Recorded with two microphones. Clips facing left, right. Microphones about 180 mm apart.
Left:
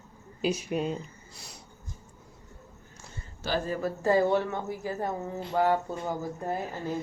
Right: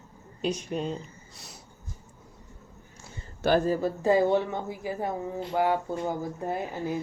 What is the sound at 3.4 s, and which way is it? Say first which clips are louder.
Speech: right 7 dB; 55° right (ahead or behind).